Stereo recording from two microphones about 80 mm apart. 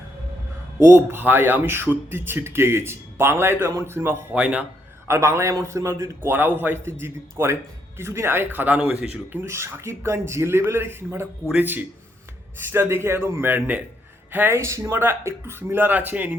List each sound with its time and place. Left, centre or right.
0.8 s a man's voice: right
4.4 s a man's voice: centre
5.0 s a man's voice: right